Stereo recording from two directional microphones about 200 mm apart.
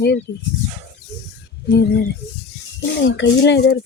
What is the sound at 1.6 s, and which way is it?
Speech, 55° left (ahead or behind).